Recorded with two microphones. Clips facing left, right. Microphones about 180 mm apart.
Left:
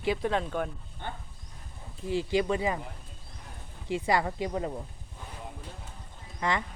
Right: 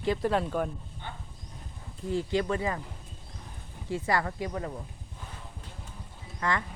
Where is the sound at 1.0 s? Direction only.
55° left (ahead or behind).